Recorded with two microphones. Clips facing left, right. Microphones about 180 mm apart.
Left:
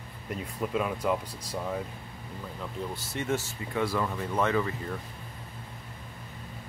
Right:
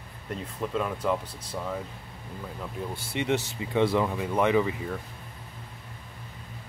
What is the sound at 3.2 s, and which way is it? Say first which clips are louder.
Speech: right 4 dB; 20° right (ahead or behind).